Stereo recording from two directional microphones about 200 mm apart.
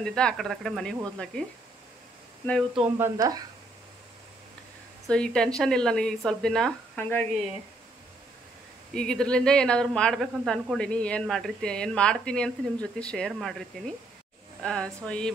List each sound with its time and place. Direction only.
0.0 s speech: 5° left (ahead or behind)
2.4 s speech: centre (ahead or behind)
3.2 s speech: 20° right (ahead or behind)
5.0 s speech: 5° left (ahead or behind)
8.9 s speech: 5° left (ahead or behind)